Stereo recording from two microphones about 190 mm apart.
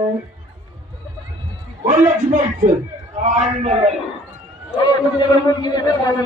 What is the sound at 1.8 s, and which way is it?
A man's voice, 40° right (ahead or behind).